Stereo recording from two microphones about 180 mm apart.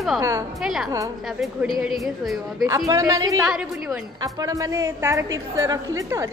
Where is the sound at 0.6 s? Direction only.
Centre (ahead or behind).